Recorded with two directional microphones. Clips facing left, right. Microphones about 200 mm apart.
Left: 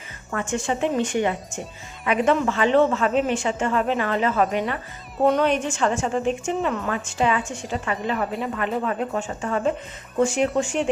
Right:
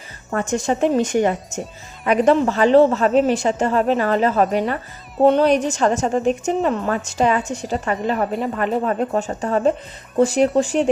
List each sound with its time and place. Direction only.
0.3 s speech: 40° right (ahead or behind)